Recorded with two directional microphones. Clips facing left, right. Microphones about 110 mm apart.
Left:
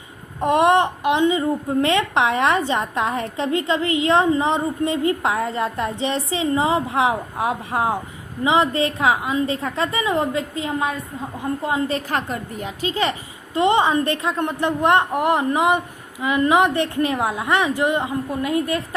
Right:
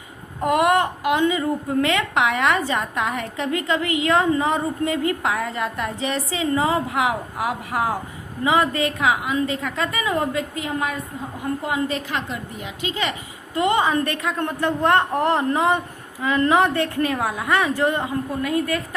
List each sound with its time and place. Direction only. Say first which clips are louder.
0.3 s a woman's voice: left 2 dB; 25° left (ahead or behind)
13.6 s a woman's voice: left 2 dB; 25° left (ahead or behind)